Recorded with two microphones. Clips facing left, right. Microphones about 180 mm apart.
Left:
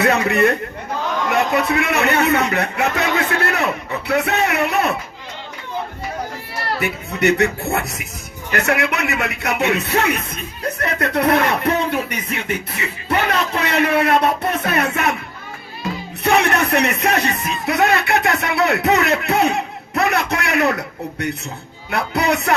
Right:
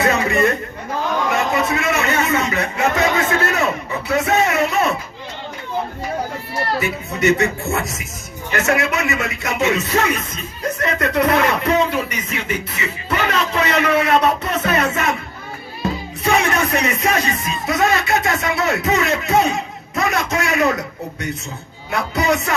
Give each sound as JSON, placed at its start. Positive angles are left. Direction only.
{"t": 0.0, "sound": "speech", "side_deg": 60}
{"t": 1.5, "sound": "a man's voice", "side_deg": 60}
{"t": 6.7, "sound": "speech", "side_deg": 60}
{"t": 16.2, "sound": "speech", "side_deg": 60}